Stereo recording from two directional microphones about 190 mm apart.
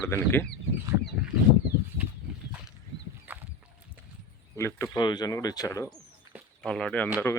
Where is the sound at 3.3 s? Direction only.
10° right (ahead or behind).